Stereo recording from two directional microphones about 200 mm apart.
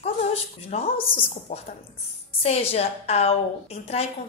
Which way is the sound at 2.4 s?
30° left (ahead or behind).